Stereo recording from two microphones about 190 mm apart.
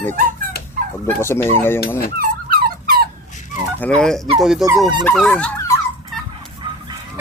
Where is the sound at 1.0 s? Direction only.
15° left (ahead or behind).